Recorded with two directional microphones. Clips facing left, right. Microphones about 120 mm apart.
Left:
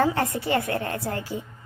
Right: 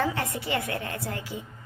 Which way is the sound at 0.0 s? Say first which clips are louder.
Left 5 dB; 40° left (ahead or behind).